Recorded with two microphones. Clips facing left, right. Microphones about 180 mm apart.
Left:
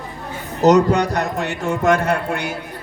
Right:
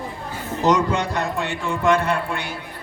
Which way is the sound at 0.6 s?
40° left (ahead or behind).